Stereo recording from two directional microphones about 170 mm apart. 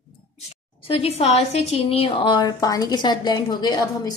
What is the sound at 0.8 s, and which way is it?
A woman's voice, 35° left (ahead or behind).